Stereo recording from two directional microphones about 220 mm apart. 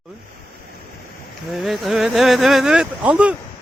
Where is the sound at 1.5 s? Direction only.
Centre (ahead or behind).